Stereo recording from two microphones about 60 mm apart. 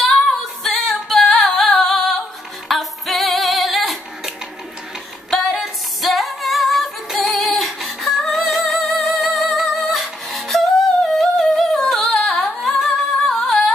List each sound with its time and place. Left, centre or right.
0.3 s singing: centre
2.7 s female singing: centre
5.3 s female singing: centre
11.1 s humming: centre